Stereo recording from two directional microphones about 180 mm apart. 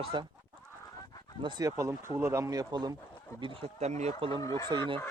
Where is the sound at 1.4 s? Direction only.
20° right (ahead or behind).